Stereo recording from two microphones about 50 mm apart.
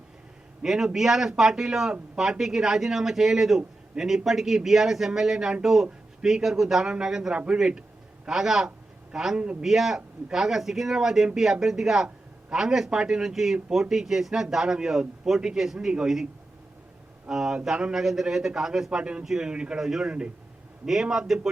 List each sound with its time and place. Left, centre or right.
0.6 s a man's voice: centre
17.2 s speech: centre
19.2 s speech: centre
19.5 s speech: centre
20.1 s a man's voice: right
20.8 s speech: centre